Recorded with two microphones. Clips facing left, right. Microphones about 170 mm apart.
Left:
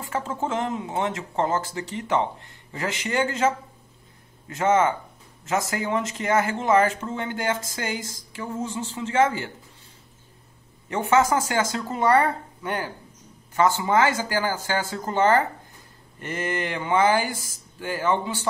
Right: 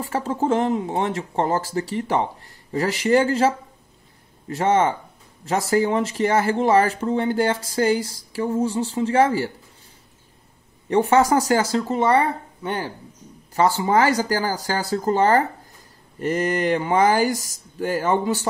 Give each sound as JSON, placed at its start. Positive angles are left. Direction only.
{"t": 0.0, "sound": "speech", "side_deg": -35}
{"t": 10.9, "sound": "speech", "side_deg": -35}